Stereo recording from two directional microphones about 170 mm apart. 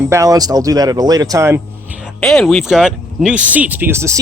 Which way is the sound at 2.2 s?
5° left (ahead or behind).